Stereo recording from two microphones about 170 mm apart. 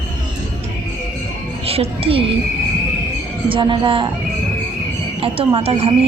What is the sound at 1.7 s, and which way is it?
Speech, 35° right (ahead or behind).